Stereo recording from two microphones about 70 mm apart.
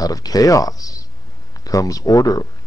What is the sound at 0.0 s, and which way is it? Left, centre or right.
Speech, left.